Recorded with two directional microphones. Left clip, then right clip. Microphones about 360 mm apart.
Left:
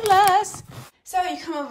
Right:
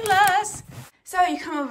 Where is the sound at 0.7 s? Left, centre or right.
Centre.